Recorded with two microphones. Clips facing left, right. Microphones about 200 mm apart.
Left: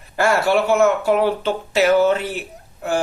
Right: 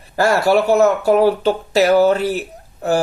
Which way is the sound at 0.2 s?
40° right (ahead or behind).